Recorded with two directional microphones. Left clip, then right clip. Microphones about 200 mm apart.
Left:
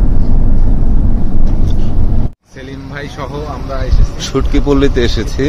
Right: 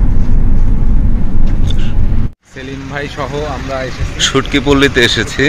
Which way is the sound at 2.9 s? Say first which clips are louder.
Right 4 dB; 40° right (ahead or behind).